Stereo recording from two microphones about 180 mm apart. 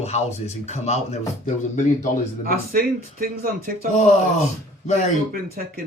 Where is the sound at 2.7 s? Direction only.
55° right (ahead or behind).